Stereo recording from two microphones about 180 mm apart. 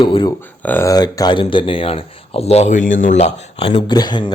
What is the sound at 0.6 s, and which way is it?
Speech, 10° left (ahead or behind).